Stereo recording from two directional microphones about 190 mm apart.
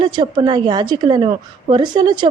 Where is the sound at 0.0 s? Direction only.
25° right (ahead or behind).